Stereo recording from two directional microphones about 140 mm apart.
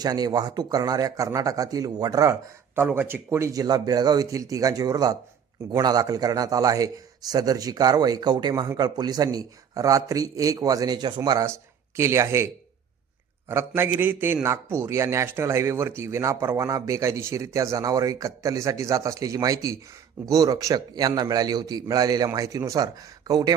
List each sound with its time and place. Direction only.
0.0 s a man's voice: 30° right (ahead or behind)
13.5 s a man's voice: 15° right (ahead or behind)